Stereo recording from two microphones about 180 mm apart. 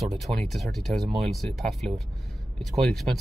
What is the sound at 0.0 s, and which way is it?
Speech, centre (ahead or behind).